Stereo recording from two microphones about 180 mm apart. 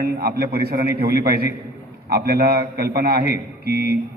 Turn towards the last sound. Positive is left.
turn(degrees=-60)  # may be behind; listen again after turning